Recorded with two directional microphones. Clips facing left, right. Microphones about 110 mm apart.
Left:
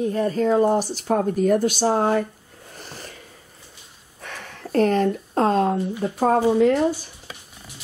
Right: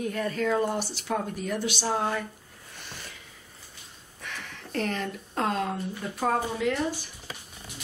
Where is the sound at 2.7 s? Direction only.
40° left (ahead or behind).